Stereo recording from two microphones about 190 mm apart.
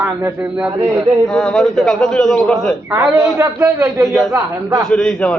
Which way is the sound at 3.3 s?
15° right (ahead or behind).